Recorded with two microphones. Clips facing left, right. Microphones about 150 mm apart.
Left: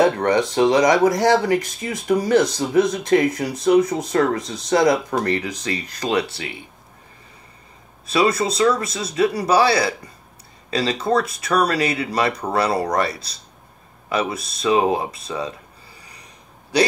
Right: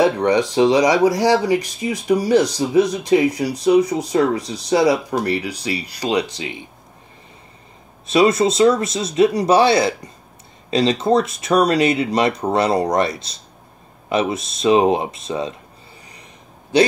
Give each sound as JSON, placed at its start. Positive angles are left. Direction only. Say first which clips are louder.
{"t": 0.0, "sound": "speech", "louder": "right 1 dB", "side_deg": -15}
{"t": 8.1, "sound": "speech", "louder": "right 4 dB", "side_deg": -25}